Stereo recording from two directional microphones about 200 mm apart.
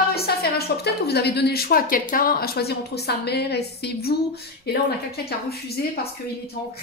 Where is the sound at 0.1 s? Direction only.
50° left (ahead or behind).